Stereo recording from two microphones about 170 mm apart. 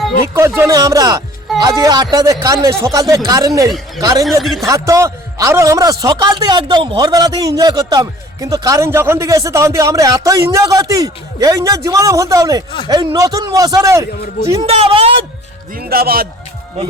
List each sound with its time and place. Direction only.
0.3 s speech: 15° right (ahead or behind)
4.3 s speech: centre (ahead or behind)
4.6 s speech: 20° right (ahead or behind)
14.6 s speech: 35° right (ahead or behind)
15.7 s speech: 65° right (ahead or behind)